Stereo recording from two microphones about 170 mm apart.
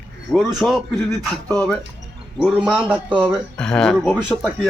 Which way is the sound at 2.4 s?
5° right (ahead or behind).